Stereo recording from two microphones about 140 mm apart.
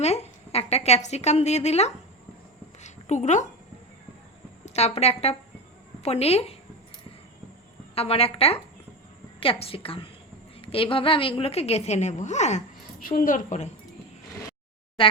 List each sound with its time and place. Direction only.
0.0 s a woman's voice: 50° left (ahead or behind)
2.8 s a sound: 60° left (ahead or behind)
4.6 s a woman's voice: 50° left (ahead or behind)
7.9 s a woman's voice: 45° left (ahead or behind)
13.1 s a woman's voice: 80° left; by 13.7 s 65° left (ahead or behind)